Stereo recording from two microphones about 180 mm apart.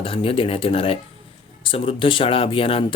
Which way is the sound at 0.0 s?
30° left (ahead or behind).